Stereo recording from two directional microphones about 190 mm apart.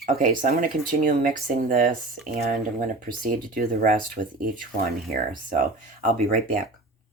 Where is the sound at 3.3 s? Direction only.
45° right (ahead or behind).